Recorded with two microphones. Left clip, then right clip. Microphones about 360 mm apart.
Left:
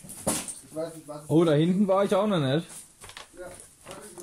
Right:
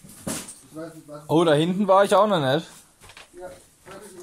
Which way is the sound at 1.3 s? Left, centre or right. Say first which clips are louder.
Right 3 dB; centre.